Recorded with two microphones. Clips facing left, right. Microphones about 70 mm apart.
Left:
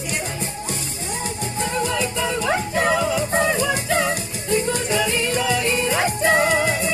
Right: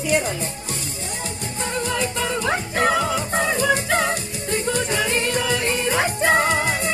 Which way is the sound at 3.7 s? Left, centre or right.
Right.